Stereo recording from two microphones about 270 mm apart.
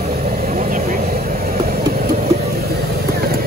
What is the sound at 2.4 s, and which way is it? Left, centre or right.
Vehicle, right.